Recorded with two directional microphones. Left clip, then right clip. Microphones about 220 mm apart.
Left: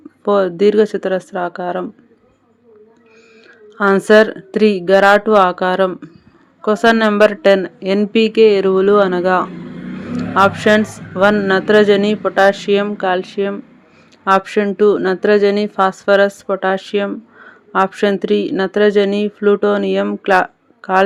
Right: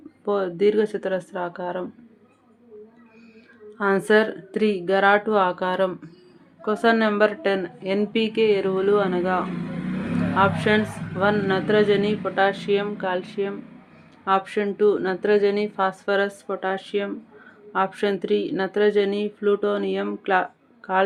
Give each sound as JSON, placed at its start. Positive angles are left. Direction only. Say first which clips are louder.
{"t": 0.3, "sound": "speech", "louder": "left 8 dB", "side_deg": 40}
{"t": 3.7, "sound": "speech", "louder": "left 9 dB", "side_deg": 40}